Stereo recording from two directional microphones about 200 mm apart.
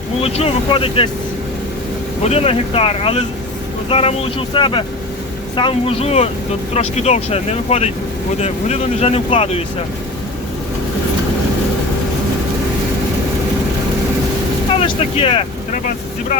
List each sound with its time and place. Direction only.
0.2 s speech: 30° left (ahead or behind)
2.2 s speech: 30° left (ahead or behind)
14.8 s speech: 25° left (ahead or behind)